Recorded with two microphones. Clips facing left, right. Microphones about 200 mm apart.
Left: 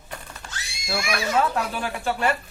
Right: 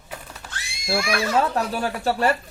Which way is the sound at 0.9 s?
30° right (ahead or behind).